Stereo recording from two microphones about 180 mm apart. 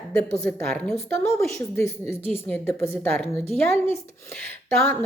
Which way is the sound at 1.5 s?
15° left (ahead or behind).